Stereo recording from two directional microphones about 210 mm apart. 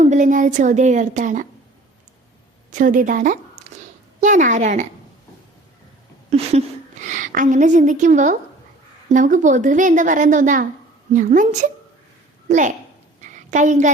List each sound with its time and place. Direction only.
0.0 s a woman's voice: 35° right (ahead or behind)
2.7 s a woman's voice: 40° right (ahead or behind)
6.3 s a woman's voice: 30° right (ahead or behind)
13.2 s a sound: 35° right (ahead or behind)